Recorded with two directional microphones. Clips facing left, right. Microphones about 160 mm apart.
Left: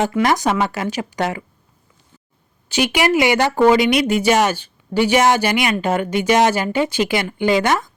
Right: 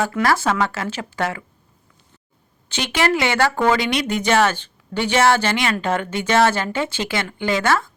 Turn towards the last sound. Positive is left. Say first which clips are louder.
# left 3 dB
turn(degrees=15)  # may be behind; listen again after turning